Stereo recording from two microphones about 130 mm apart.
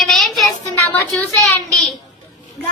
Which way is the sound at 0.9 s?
20° left (ahead or behind).